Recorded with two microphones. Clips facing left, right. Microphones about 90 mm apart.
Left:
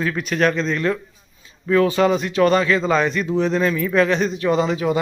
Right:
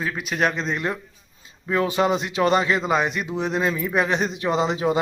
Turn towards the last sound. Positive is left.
turn(degrees=-25)  # may be behind; listen again after turning